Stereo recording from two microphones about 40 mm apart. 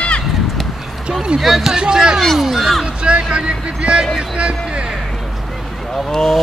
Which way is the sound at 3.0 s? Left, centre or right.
Right.